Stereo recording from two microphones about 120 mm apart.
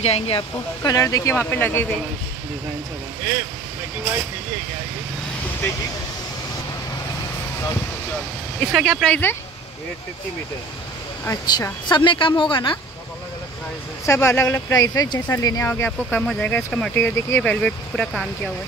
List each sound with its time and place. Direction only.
0.0 s speech: 60° left (ahead or behind)
0.8 s speech: 30° left (ahead or behind)
8.5 s speech: 5° left (ahead or behind)
11.5 s a woman's voice: 35° left (ahead or behind)
14.0 s speech: 20° left (ahead or behind)
15.7 s speech: 15° left (ahead or behind)